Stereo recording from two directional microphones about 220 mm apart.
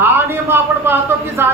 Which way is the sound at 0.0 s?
10° right (ahead or behind).